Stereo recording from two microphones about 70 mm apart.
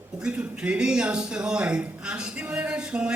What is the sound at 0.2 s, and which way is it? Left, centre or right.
A man's voice, centre.